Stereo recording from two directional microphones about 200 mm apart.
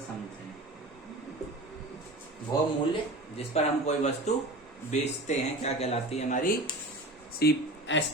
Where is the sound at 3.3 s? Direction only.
35° left (ahead or behind).